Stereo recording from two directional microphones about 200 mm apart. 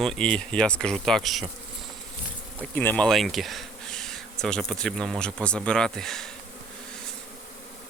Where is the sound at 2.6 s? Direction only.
10° left (ahead or behind).